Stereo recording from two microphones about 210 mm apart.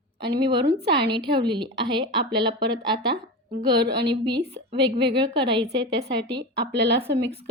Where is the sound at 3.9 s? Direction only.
55° right (ahead or behind).